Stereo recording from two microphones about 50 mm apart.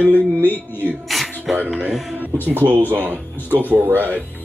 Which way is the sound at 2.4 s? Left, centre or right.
Right.